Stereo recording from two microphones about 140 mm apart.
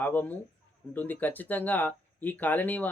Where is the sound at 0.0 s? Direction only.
10° left (ahead or behind).